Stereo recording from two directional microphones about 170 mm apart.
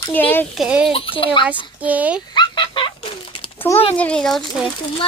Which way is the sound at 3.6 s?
10° left (ahead or behind).